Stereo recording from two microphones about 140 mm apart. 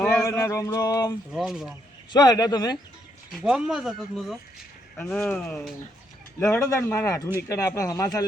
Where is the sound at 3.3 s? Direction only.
5° right (ahead or behind).